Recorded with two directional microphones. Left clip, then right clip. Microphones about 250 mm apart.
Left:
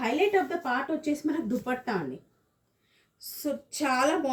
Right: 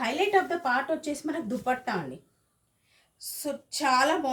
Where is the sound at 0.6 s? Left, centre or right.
Right.